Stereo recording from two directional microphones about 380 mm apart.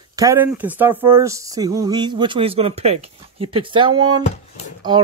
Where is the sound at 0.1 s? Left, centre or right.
Centre.